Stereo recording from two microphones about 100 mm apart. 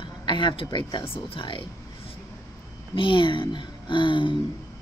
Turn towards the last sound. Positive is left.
turn(degrees=55)  # may be behind; listen again after turning